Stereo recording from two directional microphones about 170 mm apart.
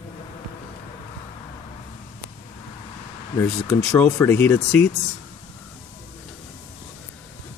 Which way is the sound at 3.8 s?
10° left (ahead or behind).